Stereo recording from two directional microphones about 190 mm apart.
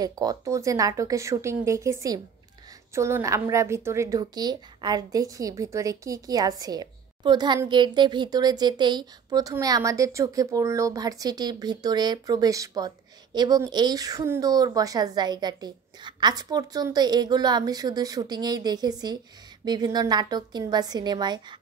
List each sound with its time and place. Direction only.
0.0 s a woman's voice: 20° right (ahead or behind)